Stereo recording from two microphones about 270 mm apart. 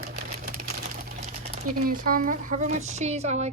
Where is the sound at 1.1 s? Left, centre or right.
Right.